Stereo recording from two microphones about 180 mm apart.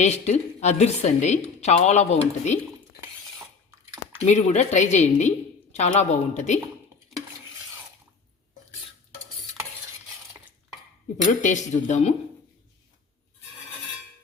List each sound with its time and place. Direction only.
0.0 s a woman's voice: 40° left (ahead or behind)
4.3 s a woman's voice: 40° left (ahead or behind)
11.3 s a woman's voice: 45° left (ahead or behind)